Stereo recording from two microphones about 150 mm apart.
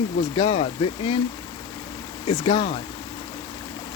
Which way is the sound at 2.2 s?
45° left (ahead or behind).